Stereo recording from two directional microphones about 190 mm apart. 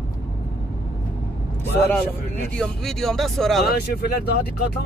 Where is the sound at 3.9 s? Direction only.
60° left (ahead or behind).